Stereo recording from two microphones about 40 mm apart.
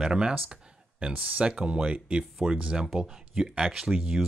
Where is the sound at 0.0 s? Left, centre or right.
Centre.